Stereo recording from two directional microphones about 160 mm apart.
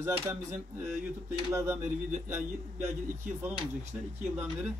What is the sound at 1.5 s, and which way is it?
Speech, 15° right (ahead or behind).